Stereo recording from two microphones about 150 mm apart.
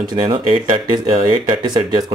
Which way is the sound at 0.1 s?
35° right (ahead or behind).